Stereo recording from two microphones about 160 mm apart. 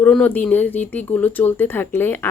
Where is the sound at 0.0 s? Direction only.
10° left (ahead or behind).